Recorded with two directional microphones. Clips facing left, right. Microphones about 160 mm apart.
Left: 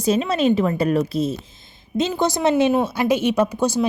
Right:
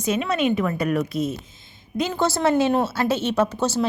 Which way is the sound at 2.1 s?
15° left (ahead or behind).